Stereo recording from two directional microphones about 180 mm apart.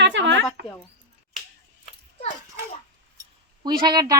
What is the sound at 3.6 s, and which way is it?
Speech, 25° right (ahead or behind).